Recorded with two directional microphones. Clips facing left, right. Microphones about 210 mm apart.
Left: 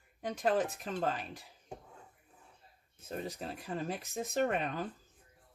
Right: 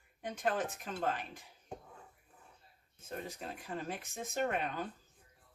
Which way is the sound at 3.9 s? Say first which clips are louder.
Left 4 dB; 35° left (ahead or behind).